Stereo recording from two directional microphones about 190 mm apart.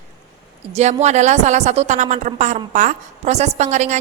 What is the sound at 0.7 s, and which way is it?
A woman's voice, 35° right (ahead or behind).